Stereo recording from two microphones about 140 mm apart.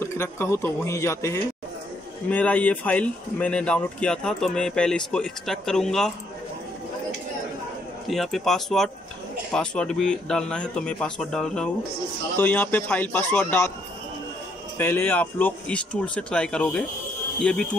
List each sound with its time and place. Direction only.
0.0 s a man's voice: 20° left (ahead or behind); by 6.1 s 5° left (ahead or behind)
8.1 s speech: centre (ahead or behind)
14.8 s speech: 15° left (ahead or behind)